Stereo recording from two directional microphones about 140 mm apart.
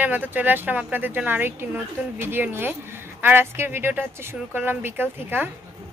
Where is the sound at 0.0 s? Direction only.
10° right (ahead or behind).